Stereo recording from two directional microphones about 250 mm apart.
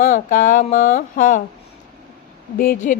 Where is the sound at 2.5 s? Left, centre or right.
Left.